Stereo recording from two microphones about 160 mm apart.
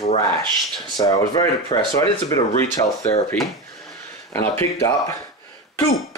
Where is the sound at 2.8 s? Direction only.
35° left (ahead or behind).